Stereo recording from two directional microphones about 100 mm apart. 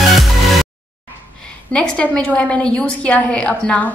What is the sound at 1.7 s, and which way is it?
A woman's voice, 10° left (ahead or behind).